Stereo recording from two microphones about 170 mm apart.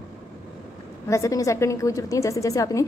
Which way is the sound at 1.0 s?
20° left (ahead or behind).